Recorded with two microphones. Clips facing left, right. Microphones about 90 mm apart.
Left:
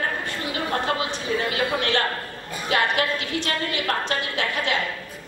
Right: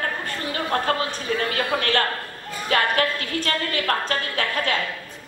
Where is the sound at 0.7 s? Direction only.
45° right (ahead or behind).